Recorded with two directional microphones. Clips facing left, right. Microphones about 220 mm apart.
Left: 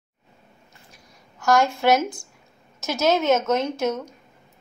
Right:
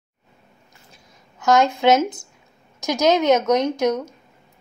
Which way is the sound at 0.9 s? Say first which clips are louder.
Right 1 dB; 20° right (ahead or behind).